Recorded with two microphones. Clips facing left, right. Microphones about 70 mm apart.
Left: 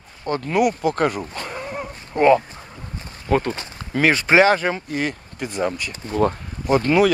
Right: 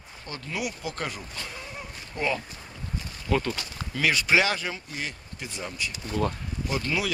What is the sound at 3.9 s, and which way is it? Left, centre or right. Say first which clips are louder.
Speech: left 7 dB; left.